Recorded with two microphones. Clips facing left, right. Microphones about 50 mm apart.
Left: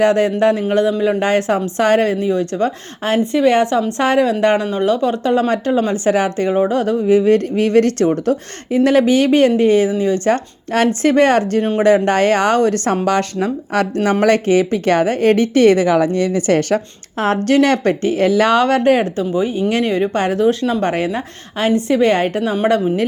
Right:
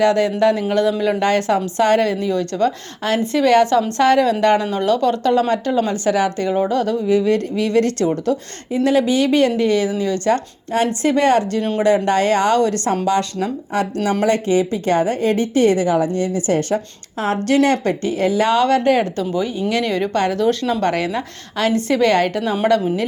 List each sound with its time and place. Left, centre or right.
0.0 s a woman's voice: left; by 4.0 s centre
4.0 s a woman's voice: left
13.9 s speech: left
14.3 s a woman's voice: left
17.2 s a woman's voice: left
19.1 s a woman's voice: centre
19.5 s a woman's voice: left